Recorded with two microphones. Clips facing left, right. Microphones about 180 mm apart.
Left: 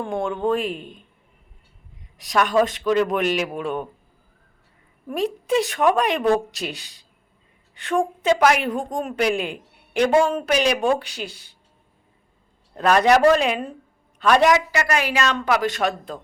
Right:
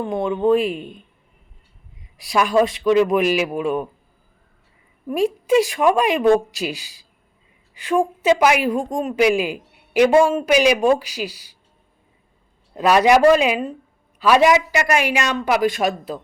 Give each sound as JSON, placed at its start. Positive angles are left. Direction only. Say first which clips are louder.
{"t": 0.0, "sound": "a woman's voice", "louder": "right 4 dB", "side_deg": -5}
{"t": 2.1, "sound": "a woman's voice", "louder": "right 2 dB", "side_deg": -5}
{"t": 5.0, "sound": "a woman's voice", "louder": "right 4 dB", "side_deg": -5}
{"t": 12.7, "sound": "speech", "louder": "right 2 dB", "side_deg": -5}